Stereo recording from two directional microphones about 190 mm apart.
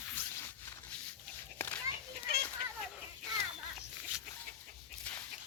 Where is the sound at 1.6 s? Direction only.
10° left (ahead or behind).